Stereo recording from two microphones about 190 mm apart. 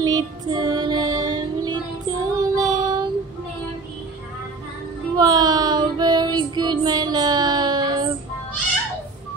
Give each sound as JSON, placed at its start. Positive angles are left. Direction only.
{"t": 0.0, "sound": "music", "side_deg": -20}
{"t": 5.1, "sound": "child singing", "side_deg": -20}